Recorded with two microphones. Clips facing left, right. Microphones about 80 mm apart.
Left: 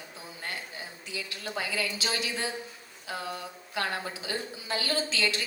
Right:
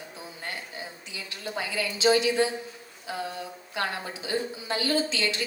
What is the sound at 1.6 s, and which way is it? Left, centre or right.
Speech, right.